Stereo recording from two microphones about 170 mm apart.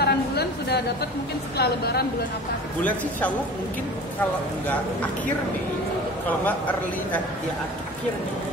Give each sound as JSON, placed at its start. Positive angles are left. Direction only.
{"t": 0.0, "sound": "a sound", "side_deg": 75}
{"t": 1.6, "sound": "a woman's voice", "side_deg": 70}
{"t": 2.8, "sound": "a man's voice", "side_deg": 10}